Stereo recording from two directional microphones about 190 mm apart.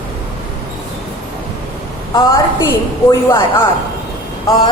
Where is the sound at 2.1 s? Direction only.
20° left (ahead or behind).